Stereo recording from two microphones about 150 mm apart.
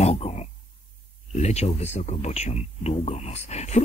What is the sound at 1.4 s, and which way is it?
Speech, 45° left (ahead or behind).